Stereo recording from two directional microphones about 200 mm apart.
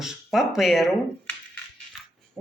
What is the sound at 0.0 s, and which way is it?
Speech, centre (ahead or behind).